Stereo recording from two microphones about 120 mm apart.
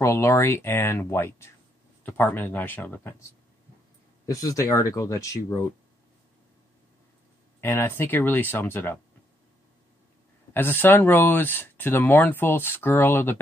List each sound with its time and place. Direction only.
0.0 s speech: 20° left (ahead or behind)
7.6 s speech: 20° left (ahead or behind)
10.5 s speech: 15° left (ahead or behind)